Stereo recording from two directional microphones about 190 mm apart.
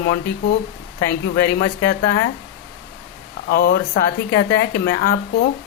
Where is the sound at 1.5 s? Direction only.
50° left (ahead or behind).